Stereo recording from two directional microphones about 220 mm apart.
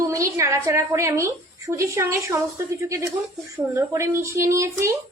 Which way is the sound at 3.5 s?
10° right (ahead or behind).